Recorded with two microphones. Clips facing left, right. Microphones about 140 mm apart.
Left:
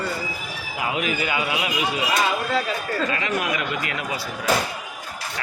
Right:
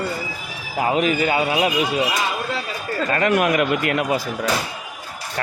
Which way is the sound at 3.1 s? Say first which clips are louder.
Right 7 dB; 50° right (ahead or behind).